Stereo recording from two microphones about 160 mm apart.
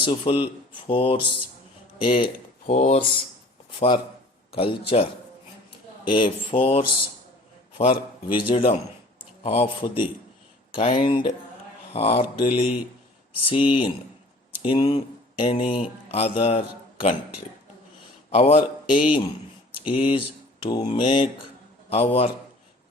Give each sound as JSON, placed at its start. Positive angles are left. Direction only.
{"t": 0.0, "sound": "a man's voice", "side_deg": 35}
{"t": 2.7, "sound": "speech", "side_deg": 45}
{"t": 3.8, "sound": "a man's voice", "side_deg": 30}
{"t": 6.1, "sound": "a man's voice", "side_deg": 30}
{"t": 18.3, "sound": "a man's voice", "side_deg": 40}